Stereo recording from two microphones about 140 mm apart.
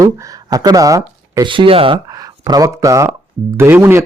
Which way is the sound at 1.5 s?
40° right (ahead or behind).